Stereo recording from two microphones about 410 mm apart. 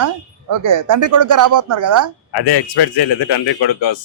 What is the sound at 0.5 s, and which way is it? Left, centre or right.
A woman's voice, right.